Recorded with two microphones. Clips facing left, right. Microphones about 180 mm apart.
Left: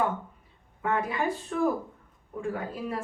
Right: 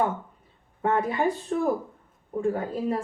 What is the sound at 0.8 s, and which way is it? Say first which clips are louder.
A woman's voice: right 4 dB; 35° right (ahead or behind).